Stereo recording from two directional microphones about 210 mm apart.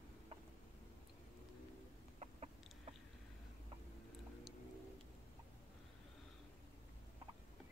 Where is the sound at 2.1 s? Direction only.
30° right (ahead or behind).